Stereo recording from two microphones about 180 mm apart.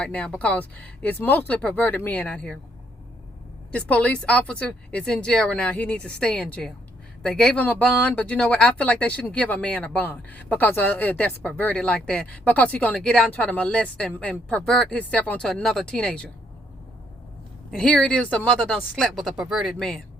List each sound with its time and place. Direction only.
0.0 s speech: 5° left (ahead or behind)
3.7 s speech: 10° left (ahead or behind)
17.7 s speech: 5° left (ahead or behind)